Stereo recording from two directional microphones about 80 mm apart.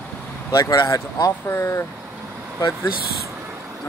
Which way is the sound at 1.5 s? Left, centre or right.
Left.